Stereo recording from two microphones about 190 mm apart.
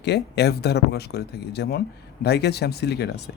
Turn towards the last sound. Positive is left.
turn(degrees=60)  # may be behind; listen again after turning